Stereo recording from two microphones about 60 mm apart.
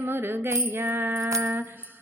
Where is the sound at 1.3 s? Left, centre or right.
Right.